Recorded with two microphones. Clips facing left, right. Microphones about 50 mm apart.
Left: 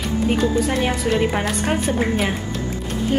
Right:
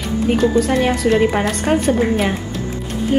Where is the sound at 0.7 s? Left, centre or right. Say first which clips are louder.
Right 5 dB; centre.